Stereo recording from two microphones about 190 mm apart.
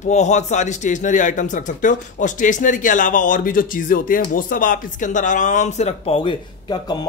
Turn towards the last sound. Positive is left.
turn(degrees=25)  # may be behind; listen again after turning